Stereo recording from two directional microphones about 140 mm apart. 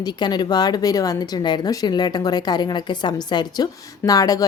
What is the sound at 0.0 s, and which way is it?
Speech, 30° left (ahead or behind).